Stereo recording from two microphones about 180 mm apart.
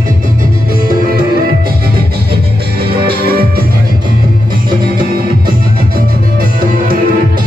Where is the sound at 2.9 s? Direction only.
60° right (ahead or behind).